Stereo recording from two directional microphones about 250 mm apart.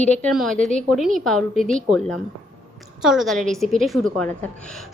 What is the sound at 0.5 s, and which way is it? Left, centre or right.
Speech, right.